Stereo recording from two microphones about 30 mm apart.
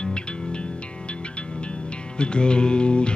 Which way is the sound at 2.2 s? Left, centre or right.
Left.